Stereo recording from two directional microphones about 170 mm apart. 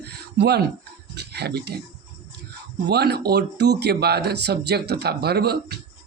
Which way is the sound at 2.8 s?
75° right (ahead or behind).